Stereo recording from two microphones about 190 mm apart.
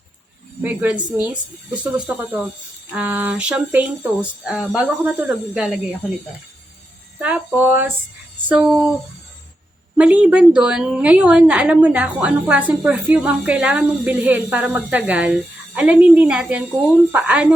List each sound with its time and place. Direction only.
0.6 s a woman's voice: 10° right (ahead or behind)
7.2 s a woman's voice: 10° right (ahead or behind)
10.0 s a woman's voice: 5° right (ahead or behind)